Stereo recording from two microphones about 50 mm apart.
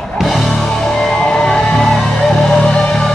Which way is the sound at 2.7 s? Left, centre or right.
Centre.